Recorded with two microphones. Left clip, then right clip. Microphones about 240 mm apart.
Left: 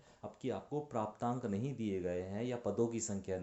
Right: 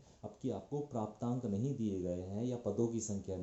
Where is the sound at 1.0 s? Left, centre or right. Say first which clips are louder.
Left 6 dB; left.